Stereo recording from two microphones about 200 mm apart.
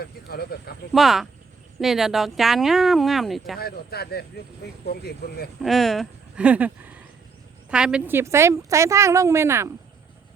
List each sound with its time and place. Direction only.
0.0 s speech: 50° left (ahead or behind)
0.9 s speech: centre (ahead or behind)
3.6 s speech: 50° left (ahead or behind)
5.6 s a woman's voice: centre (ahead or behind)